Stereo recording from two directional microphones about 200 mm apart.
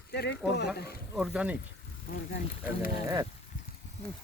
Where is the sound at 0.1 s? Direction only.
55° left (ahead or behind).